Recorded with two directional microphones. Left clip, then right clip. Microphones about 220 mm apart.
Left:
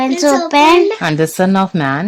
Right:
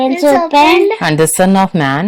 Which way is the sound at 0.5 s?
45° left (ahead or behind).